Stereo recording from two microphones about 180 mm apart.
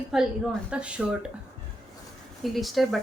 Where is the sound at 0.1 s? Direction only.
5° right (ahead or behind).